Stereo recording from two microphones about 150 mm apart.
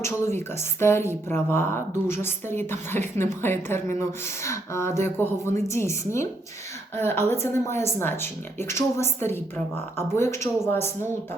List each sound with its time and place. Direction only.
0.3 s a woman's voice: 15° left (ahead or behind)